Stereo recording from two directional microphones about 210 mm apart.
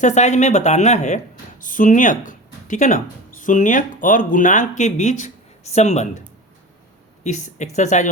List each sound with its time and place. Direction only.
0.0 s speech: 35° left (ahead or behind)
7.3 s speech: 35° left (ahead or behind)